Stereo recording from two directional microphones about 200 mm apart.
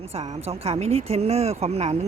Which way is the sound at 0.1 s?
30° right (ahead or behind).